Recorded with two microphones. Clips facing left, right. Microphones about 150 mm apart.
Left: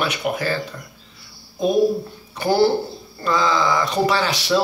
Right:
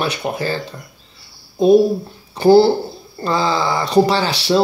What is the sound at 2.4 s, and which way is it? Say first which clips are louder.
Speech: right 7 dB; 30° right (ahead or behind).